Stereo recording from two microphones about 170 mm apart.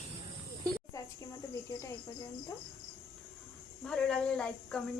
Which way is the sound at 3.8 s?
5° left (ahead or behind).